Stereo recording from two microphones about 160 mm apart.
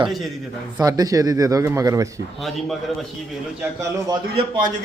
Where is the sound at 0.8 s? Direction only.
20° right (ahead or behind).